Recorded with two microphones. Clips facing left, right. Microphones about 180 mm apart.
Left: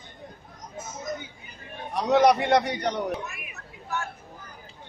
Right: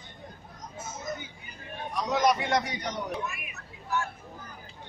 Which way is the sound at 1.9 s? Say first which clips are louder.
Left 6 dB; 65° left (ahead or behind).